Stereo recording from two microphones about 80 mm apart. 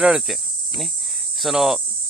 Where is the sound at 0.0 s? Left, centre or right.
Centre.